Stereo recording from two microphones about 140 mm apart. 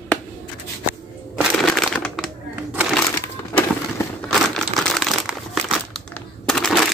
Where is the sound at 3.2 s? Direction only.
20° left (ahead or behind).